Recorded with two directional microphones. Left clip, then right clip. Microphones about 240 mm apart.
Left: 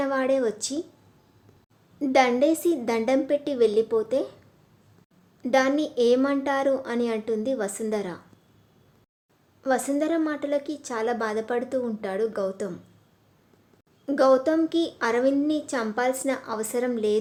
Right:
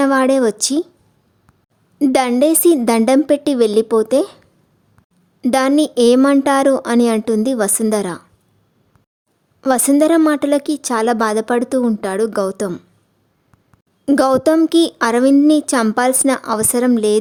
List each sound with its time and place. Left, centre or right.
0.0 s a woman's voice: right
2.0 s a woman's voice: right
5.4 s a woman's voice: right
9.6 s a woman's voice: right
14.0 s a woman's voice: right